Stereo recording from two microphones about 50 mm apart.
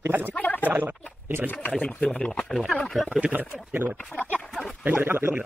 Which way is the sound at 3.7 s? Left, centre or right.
Right.